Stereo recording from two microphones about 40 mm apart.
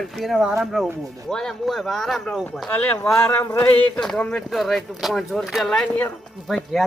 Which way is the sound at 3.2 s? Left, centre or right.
Left.